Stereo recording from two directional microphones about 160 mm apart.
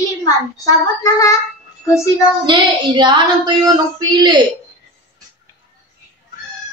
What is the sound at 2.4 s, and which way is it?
Child singing, 30° right (ahead or behind).